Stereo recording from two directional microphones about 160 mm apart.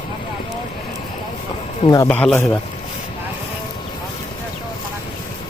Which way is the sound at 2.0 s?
5° left (ahead or behind).